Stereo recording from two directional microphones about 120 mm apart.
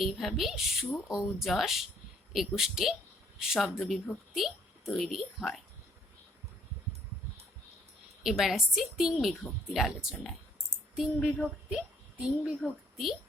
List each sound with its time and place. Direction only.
0.0 s a woman's voice: centre (ahead or behind)
8.2 s a woman's voice: centre (ahead or behind)